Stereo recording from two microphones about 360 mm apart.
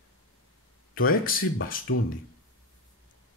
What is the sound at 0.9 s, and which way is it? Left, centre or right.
Speech, left.